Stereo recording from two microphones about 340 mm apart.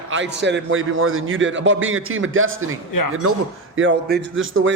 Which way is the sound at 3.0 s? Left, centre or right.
Left.